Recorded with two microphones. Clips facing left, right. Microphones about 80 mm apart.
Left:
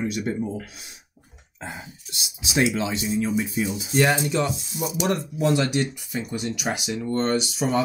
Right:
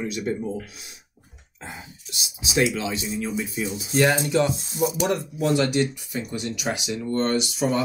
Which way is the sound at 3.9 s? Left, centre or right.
Centre.